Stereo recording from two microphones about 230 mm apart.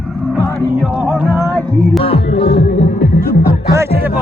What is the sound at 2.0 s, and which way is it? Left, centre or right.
Music, left.